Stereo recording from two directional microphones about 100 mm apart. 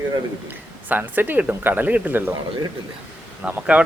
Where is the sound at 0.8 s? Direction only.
20° right (ahead or behind).